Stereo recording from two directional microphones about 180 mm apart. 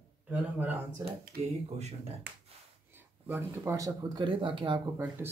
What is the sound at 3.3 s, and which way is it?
Speech, 15° right (ahead or behind).